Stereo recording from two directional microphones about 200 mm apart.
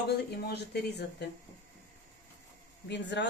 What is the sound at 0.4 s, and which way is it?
Speech, 55° left (ahead or behind).